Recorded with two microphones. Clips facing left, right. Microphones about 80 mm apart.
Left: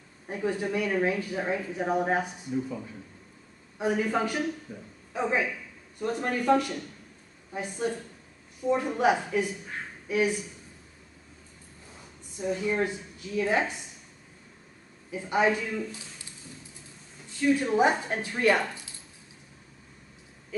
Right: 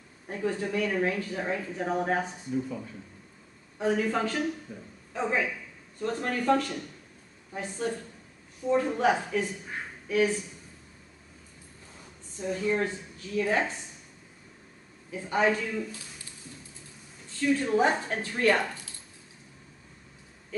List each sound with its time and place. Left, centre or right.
0.3 s speech: centre
12.4 s speech: centre
15.0 s speech: centre
17.3 s a woman's voice: centre